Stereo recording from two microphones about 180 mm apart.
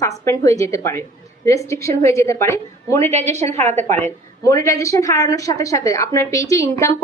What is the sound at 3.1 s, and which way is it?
Speech, 40° right (ahead or behind).